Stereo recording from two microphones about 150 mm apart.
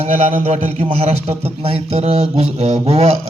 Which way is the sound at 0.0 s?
50° right (ahead or behind).